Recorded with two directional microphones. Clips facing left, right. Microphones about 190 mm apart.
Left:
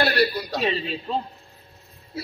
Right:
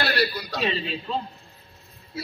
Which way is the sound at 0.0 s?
45° left (ahead or behind).